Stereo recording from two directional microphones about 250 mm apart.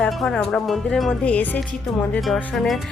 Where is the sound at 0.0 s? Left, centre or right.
Centre.